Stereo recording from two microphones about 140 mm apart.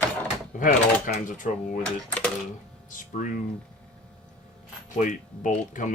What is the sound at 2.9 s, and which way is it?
Speech, 75° left (ahead or behind).